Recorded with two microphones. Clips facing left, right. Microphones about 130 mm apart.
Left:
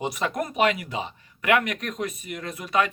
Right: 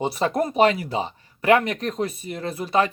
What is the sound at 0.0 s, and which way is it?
Speech, 30° right (ahead or behind).